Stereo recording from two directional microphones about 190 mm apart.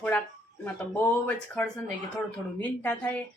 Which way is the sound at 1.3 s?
5° left (ahead or behind).